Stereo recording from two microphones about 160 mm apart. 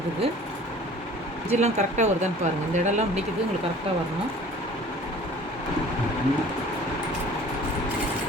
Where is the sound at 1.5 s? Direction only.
45° right (ahead or behind).